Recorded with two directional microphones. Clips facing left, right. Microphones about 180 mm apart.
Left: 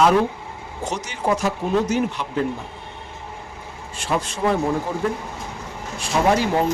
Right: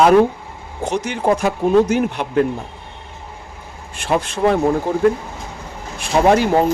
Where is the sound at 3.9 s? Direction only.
60° right (ahead or behind).